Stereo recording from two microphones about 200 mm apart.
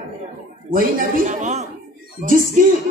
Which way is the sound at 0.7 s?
45° right (ahead or behind).